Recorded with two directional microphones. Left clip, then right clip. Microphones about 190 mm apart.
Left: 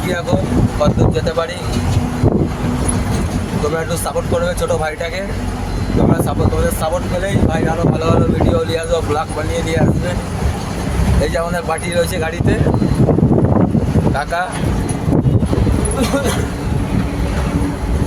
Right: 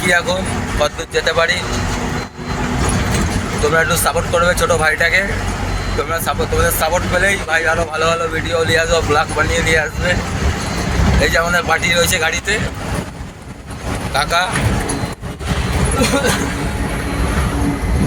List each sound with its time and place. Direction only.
0.8 s speech: 10° left (ahead or behind)
3.8 s speech: 10° left (ahead or behind)
6.9 s speech: 15° left (ahead or behind)
8.7 s speech: 15° left (ahead or behind)
11.2 s speech: 25° left (ahead or behind)